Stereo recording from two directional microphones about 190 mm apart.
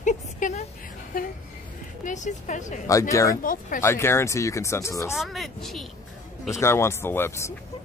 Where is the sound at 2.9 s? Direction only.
15° left (ahead or behind).